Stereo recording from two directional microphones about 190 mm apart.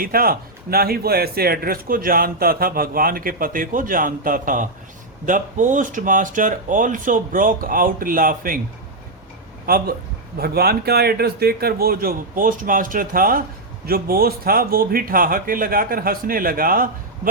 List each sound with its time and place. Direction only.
0.0 s a man's voice: 50° right (ahead or behind)
9.6 s a man's voice: 50° right (ahead or behind)